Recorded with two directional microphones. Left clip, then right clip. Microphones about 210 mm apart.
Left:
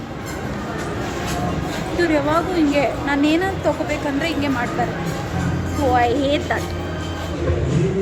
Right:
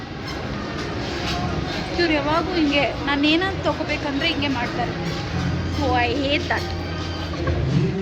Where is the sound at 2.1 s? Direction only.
10° left (ahead or behind).